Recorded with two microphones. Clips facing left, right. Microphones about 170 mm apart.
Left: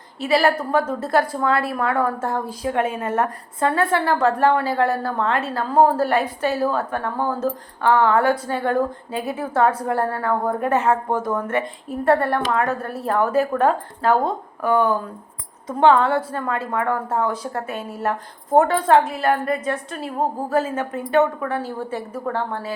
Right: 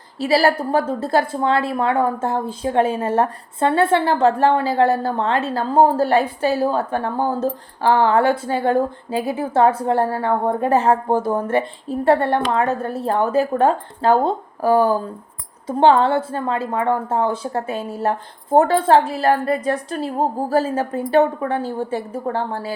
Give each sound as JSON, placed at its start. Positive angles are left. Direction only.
{"t": 0.2, "sound": "a woman's voice", "side_deg": -35}